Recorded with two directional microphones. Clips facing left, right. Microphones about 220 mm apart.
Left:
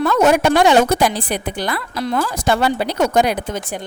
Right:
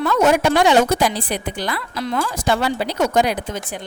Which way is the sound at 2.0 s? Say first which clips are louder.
Left 3 dB; 40° left (ahead or behind).